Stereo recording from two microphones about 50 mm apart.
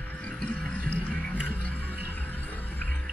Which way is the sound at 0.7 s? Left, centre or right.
Left.